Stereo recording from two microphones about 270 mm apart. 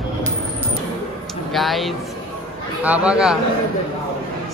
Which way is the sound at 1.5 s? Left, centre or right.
Centre.